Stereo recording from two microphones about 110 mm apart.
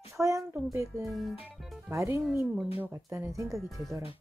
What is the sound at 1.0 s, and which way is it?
Speech, centre (ahead or behind).